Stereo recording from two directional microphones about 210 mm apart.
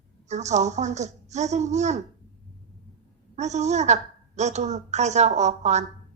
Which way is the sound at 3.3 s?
35° right (ahead or behind).